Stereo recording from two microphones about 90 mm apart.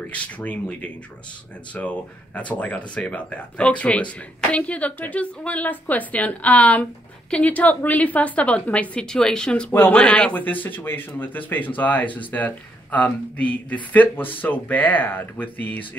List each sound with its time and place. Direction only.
0.1 s speech: 15° left (ahead or behind)
9.7 s speech: 25° left (ahead or behind)